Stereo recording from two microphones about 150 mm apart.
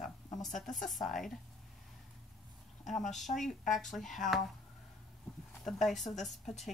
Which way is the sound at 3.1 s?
Centre (ahead or behind).